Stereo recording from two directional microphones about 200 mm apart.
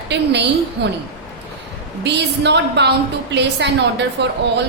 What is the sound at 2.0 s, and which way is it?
A woman's voice, 60° right (ahead or behind).